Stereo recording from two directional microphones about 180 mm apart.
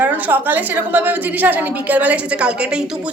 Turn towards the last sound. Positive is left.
turn(degrees=-5)  # may be behind; listen again after turning